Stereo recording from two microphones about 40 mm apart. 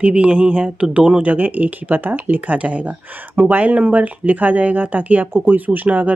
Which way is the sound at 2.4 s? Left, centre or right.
Right.